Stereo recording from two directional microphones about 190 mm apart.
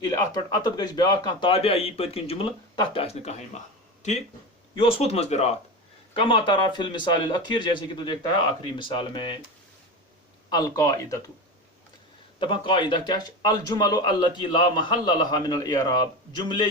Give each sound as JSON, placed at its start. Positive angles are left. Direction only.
{"t": 0.0, "sound": "a man's voice", "side_deg": 20}
{"t": 4.7, "sound": "a man's voice", "side_deg": 30}
{"t": 10.5, "sound": "speech", "side_deg": 20}
{"t": 12.4, "sound": "a man's voice", "side_deg": 25}